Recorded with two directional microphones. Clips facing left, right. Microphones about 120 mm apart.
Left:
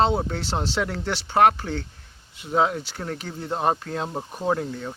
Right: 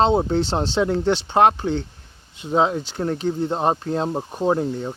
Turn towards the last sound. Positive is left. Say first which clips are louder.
# right 4 dB
turn(degrees=-25)  # may be behind; listen again after turning